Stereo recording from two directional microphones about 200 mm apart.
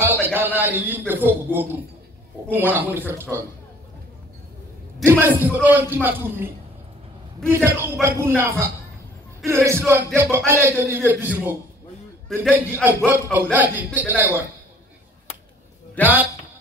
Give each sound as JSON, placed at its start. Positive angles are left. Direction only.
{"t": 0.0, "sound": "a sound", "side_deg": -10}
{"t": 0.6, "sound": "a man's voice", "side_deg": -10}
{"t": 5.0, "sound": "a man's voice", "side_deg": -10}
{"t": 7.4, "sound": "a man's voice", "side_deg": -10}
{"t": 16.0, "sound": "a man's voice", "side_deg": 10}